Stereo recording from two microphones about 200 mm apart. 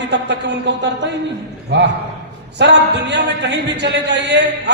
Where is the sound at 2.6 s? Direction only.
60° right (ahead or behind).